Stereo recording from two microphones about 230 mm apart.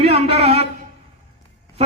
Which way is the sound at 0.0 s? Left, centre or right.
Right.